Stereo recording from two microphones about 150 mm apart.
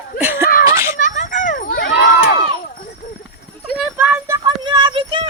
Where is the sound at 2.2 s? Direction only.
90° left.